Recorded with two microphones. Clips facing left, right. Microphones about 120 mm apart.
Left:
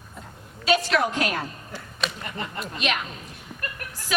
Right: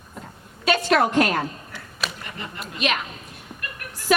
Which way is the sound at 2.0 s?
Centre (ahead or behind).